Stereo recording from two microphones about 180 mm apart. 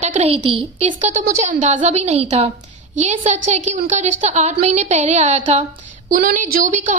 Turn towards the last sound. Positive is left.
turn(degrees=-45)  # may be behind; listen again after turning